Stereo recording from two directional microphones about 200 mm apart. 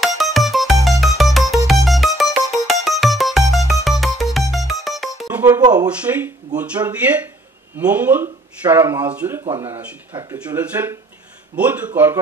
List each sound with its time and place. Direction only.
0.0 s music: centre (ahead or behind)
5.4 s music: 20° right (ahead or behind)
6.1 s speech: 10° right (ahead or behind)
7.7 s speech: 10° right (ahead or behind)